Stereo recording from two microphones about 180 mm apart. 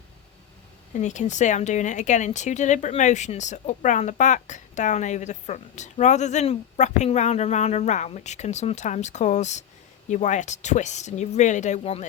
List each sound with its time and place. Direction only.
0.9 s speech: 40° left (ahead or behind)